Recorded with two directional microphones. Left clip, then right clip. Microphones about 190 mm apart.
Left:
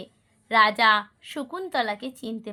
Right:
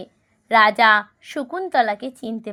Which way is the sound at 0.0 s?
25° right (ahead or behind).